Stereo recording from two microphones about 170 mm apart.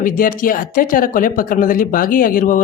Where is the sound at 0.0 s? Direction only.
55° left (ahead or behind).